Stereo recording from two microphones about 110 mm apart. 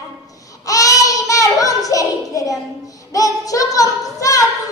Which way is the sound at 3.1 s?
30° left (ahead or behind).